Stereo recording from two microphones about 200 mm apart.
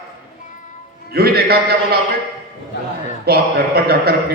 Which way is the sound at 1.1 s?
50° right (ahead or behind).